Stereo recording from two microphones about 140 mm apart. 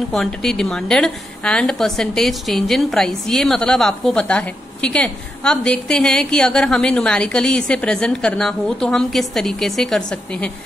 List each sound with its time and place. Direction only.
0.1 s a woman's voice: 5° left (ahead or behind)